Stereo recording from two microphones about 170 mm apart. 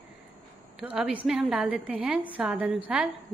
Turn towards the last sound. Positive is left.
turn(degrees=-5)  # may be behind; listen again after turning